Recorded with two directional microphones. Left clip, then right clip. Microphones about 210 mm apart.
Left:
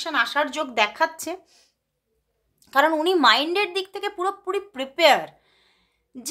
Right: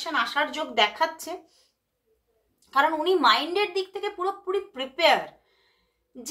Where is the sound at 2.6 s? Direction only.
50° left (ahead or behind).